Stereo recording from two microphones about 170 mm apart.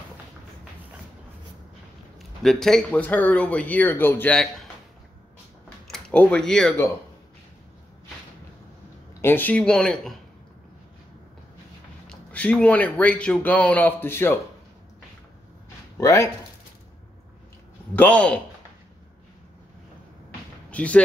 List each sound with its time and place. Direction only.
2.4 s speech: 5° left (ahead or behind)
5.9 s speech: 5° left (ahead or behind)
9.2 s speech: 10° left (ahead or behind)
12.1 s speech: 10° left (ahead or behind)
16.0 s speech: 20° left (ahead or behind)
17.9 s speech: 10° left (ahead or behind)
20.7 s speech: 10° left (ahead or behind)